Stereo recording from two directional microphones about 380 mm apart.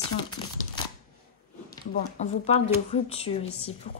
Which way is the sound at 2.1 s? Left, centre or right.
Centre.